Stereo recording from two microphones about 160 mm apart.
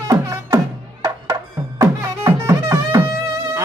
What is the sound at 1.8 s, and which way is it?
Music, 20° right (ahead or behind).